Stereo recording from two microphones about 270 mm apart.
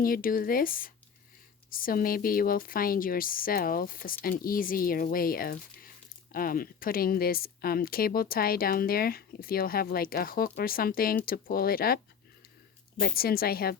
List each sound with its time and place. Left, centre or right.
0.0 s speech: left
13.0 s speech: left